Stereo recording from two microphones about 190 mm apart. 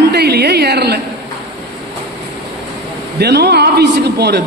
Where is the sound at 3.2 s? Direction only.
60° right (ahead or behind).